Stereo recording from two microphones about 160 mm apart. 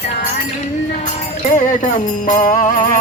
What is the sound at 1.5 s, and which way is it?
Music, 50° left (ahead or behind).